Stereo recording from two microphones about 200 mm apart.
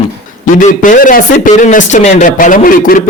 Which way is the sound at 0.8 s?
40° left (ahead or behind).